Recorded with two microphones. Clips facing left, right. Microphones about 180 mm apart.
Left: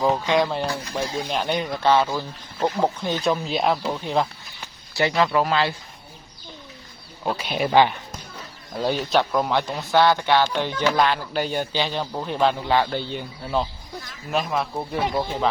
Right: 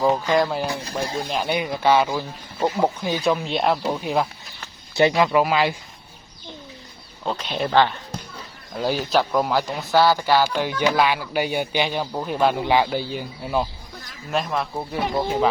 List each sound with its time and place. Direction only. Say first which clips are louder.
0.0 s speech: right 1 dB; centre (ahead or behind)
4.9 s speech: right 3 dB; 15° right (ahead or behind)
7.3 s speech: left 1 dB; 10° left (ahead or behind)
8.7 s speech: even; 5° right (ahead or behind)